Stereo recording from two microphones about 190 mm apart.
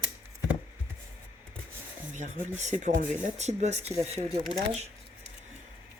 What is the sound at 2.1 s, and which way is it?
Speech, 40° right (ahead or behind).